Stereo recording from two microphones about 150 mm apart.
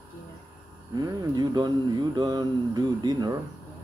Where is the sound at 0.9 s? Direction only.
30° right (ahead or behind).